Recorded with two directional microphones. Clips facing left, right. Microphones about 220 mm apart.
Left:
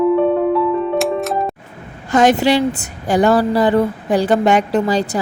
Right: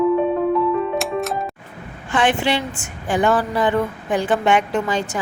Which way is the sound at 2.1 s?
40° left (ahead or behind).